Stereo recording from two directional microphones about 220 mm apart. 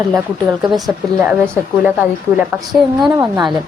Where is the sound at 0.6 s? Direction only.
Centre (ahead or behind).